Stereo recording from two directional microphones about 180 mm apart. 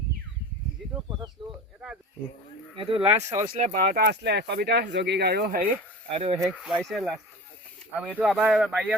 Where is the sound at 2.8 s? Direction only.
30° right (ahead or behind).